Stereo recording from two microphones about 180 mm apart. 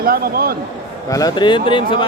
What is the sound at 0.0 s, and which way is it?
Speech, 55° right (ahead or behind).